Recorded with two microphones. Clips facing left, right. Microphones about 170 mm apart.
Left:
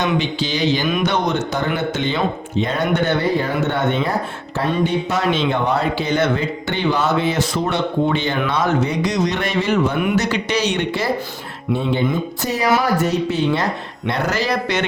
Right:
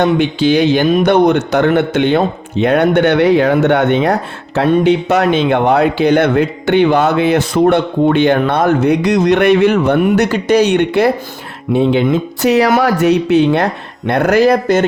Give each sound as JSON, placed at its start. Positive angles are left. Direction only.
{"t": 0.0, "sound": "speech", "side_deg": -60}
{"t": 10.2, "sound": "speech", "side_deg": -50}